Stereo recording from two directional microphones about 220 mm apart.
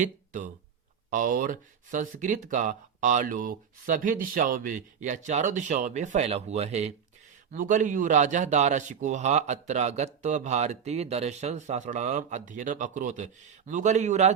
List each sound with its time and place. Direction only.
1.1 s a man's voice: 40° right (ahead or behind)